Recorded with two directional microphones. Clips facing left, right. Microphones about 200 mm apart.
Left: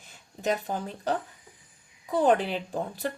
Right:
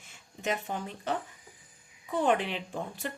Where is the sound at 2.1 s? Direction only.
35° left (ahead or behind).